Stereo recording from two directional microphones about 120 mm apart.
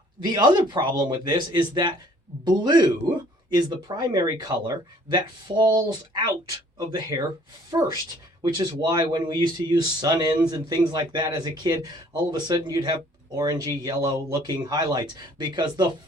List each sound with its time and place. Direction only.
0.2 s speech: 35° right (ahead or behind)